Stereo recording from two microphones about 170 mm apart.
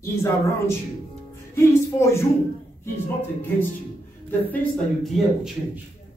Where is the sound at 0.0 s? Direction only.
15° left (ahead or behind).